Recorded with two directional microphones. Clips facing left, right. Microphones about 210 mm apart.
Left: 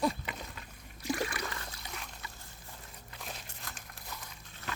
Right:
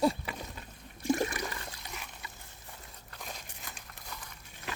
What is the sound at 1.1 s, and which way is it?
Water, 25° right (ahead or behind).